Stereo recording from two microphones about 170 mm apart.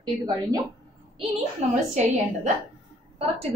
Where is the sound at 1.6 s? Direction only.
40° right (ahead or behind).